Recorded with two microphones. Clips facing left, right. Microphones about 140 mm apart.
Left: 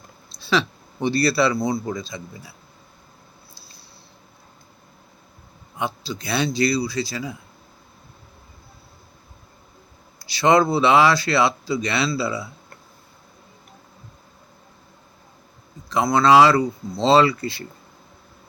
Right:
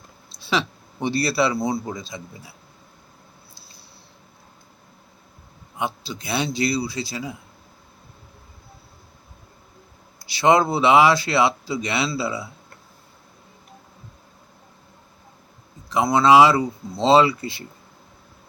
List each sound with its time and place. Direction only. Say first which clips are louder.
0.3 s speech: left 2 dB; 15° right (ahead or behind)
5.8 s a man's voice: left 1 dB; 15° right (ahead or behind)
10.3 s speech: left 1 dB; 15° right (ahead or behind)
15.9 s speech: even; 10° right (ahead or behind)